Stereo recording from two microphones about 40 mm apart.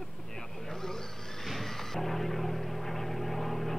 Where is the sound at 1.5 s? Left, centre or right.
Centre.